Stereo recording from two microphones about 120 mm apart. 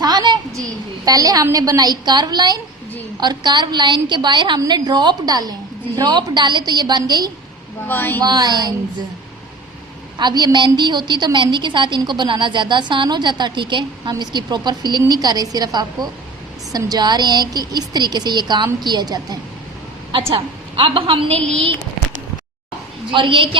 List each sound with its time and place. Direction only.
0.0 s a sound: 35° right (ahead or behind)
1.0 s a woman's voice: 30° right (ahead or behind)
7.9 s speech: 15° left (ahead or behind)
8.2 s a woman's voice: 35° right (ahead or behind)
10.2 s a woman's voice: 35° right (ahead or behind)
20.3 s a woman's voice: 45° right (ahead or behind)
23.1 s a woman's voice: 45° right (ahead or behind)